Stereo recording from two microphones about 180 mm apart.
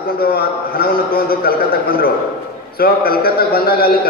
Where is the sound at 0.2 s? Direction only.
60° left (ahead or behind).